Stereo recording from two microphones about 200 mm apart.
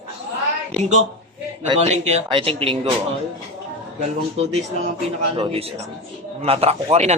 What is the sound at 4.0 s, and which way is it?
A man's voice, 30° right (ahead or behind).